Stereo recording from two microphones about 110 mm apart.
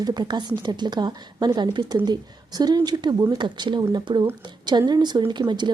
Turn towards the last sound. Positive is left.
turn(degrees=-45)  # may be behind; listen again after turning